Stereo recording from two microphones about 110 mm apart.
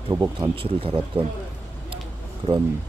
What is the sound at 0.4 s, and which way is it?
Speech, 55° right (ahead or behind).